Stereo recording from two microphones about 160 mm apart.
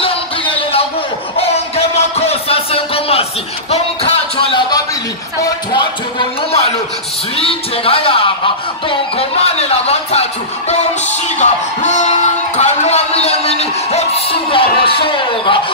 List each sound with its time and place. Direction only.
0.0 s a sound: 35° left (ahead or behind)
3.7 s music: 35° left (ahead or behind)
5.4 s a sound: 30° left (ahead or behind)
7.3 s speech: 35° left (ahead or behind)
9.4 s speech: 40° left (ahead or behind)
11.3 s music: 45° left (ahead or behind); by 15.6 s 30° left (ahead or behind)